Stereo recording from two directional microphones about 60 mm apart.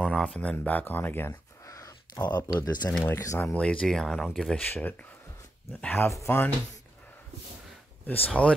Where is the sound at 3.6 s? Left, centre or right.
Centre.